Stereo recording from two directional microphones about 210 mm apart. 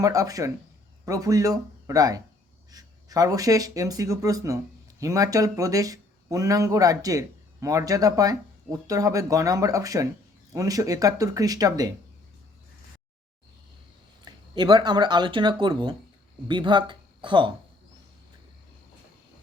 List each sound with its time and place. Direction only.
0.0 s speech: 15° right (ahead or behind)
14.3 s speech: 20° right (ahead or behind)